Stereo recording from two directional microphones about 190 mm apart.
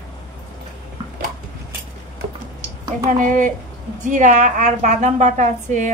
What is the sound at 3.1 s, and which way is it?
A woman's voice, 45° right (ahead or behind).